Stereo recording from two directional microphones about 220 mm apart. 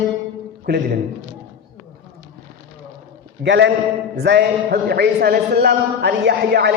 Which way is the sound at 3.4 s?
55° right (ahead or behind).